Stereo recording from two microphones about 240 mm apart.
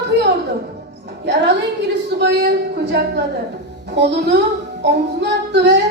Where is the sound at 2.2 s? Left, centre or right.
Right.